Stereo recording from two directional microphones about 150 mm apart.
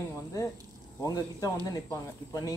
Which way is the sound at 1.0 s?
25° left (ahead or behind).